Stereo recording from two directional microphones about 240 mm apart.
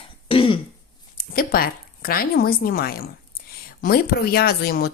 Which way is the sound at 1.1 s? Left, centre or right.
Left.